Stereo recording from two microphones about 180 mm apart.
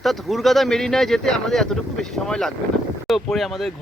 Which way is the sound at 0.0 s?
Centre (ahead or behind).